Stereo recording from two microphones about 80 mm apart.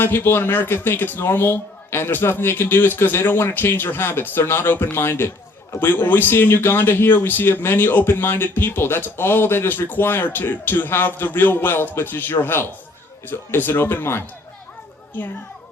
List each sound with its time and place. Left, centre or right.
0.0 s speech: left